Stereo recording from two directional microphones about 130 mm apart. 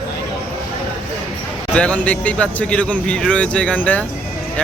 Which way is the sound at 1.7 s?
10° left (ahead or behind).